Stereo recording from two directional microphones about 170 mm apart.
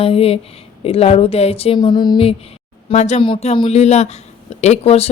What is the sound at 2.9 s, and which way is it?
Speech, 40° left (ahead or behind).